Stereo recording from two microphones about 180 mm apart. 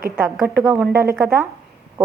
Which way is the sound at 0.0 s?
10° right (ahead or behind).